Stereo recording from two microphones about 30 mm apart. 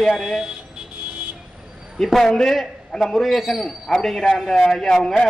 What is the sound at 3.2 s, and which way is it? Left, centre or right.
Speech, centre.